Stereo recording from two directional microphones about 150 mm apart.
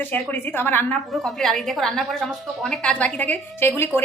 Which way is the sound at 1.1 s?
Centre (ahead or behind).